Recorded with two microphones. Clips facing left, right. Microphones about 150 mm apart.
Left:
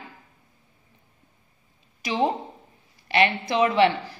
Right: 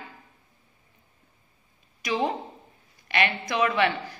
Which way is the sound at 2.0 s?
30° left (ahead or behind).